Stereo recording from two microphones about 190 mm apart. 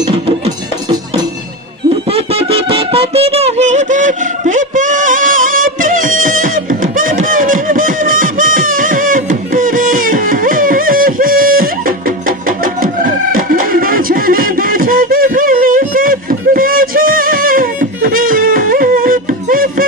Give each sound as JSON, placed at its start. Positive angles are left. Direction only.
{"t": 2.1, "sound": "music", "side_deg": -30}